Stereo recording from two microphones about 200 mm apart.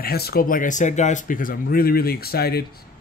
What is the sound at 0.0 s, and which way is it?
Speech, 50° left (ahead or behind).